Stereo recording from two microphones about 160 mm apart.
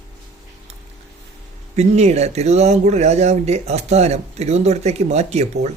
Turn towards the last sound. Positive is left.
turn(degrees=-45)  # may be behind; listen again after turning